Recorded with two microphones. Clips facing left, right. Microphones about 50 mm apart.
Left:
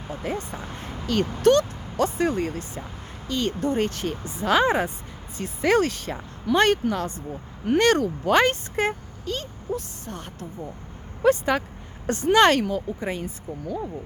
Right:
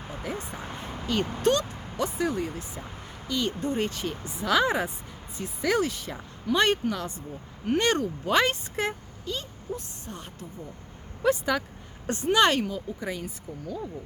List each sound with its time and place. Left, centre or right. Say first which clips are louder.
0.3 s speech: left 4 dB; left
2.0 s speech: left 5 dB; left
7.8 s speech: left 6 dB; left
11.2 s speech: left 4 dB; left
12.0 s speech: left 5 dB; left
13.0 s speech: left 4 dB; left